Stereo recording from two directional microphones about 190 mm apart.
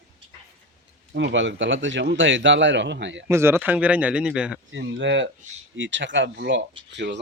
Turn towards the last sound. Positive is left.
turn(degrees=-65)  # may be behind; listen again after turning